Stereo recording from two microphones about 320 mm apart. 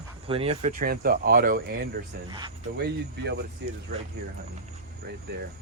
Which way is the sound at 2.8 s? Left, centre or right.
Right.